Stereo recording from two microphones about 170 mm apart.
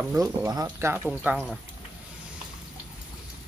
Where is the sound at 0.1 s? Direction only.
20° right (ahead or behind).